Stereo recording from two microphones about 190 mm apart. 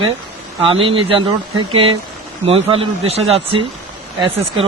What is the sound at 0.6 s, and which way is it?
Speech, 30° right (ahead or behind).